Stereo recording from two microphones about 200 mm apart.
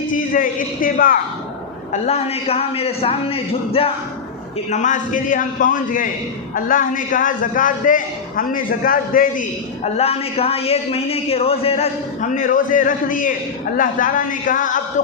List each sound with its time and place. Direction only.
0.1 s a man's voice: 45° left (ahead or behind)
1.9 s a man's voice: 30° left (ahead or behind)
9.8 s a man's voice: 30° left (ahead or behind)